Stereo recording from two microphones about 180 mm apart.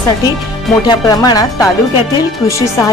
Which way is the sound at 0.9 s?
20° left (ahead or behind).